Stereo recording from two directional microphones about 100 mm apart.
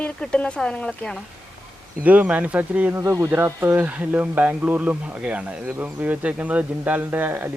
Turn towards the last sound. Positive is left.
turn(degrees=-20)  # may be behind; listen again after turning